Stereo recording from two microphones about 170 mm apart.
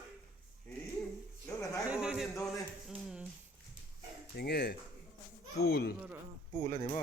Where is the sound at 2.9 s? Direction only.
Centre (ahead or behind).